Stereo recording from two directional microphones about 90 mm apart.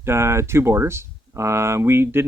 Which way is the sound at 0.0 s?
30° right (ahead or behind).